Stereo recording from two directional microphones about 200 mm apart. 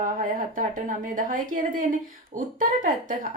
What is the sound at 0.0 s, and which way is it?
A woman's voice, 45° right (ahead or behind).